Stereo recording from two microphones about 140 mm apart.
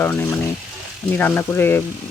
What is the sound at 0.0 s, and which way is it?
Speech, 15° left (ahead or behind).